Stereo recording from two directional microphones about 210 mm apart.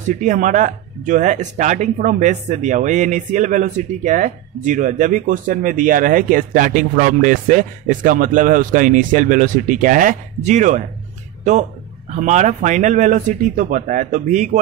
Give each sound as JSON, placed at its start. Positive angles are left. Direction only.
{"t": 0.0, "sound": "speech", "side_deg": -35}
{"t": 12.2, "sound": "speech", "side_deg": -35}